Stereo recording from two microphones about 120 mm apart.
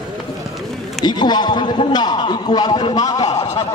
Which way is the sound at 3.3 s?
60° left (ahead or behind).